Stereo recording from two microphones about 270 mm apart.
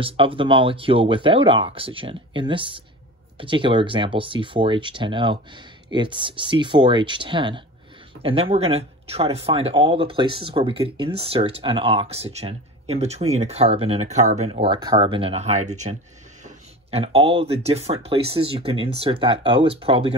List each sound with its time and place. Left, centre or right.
0.0 s speech: centre